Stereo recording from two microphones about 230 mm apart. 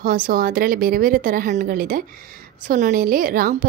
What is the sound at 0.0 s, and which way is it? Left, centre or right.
Speech, right.